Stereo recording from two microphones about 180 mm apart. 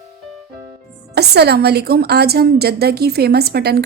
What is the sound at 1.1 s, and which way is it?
A woman's voice, 65° right (ahead or behind).